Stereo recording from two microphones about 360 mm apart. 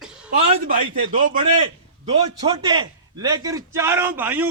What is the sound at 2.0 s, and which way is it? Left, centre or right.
A man's voice, centre.